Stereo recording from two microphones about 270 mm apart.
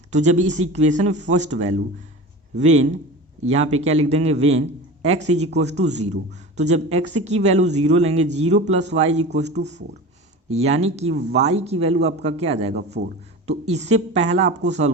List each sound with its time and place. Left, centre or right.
0.1 s a man's voice: right
10.5 s a man's voice: right
12.7 s a man's voice: right
13.5 s a man's voice: right